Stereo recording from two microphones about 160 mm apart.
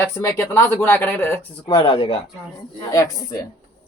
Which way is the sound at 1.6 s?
30° left (ahead or behind).